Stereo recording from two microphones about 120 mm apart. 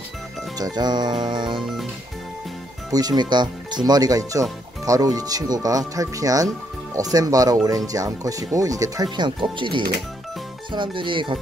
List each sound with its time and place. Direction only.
0.6 s speech: 35° right (ahead or behind)
1.6 s music: 5° right (ahead or behind)
2.9 s speech: 35° right (ahead or behind)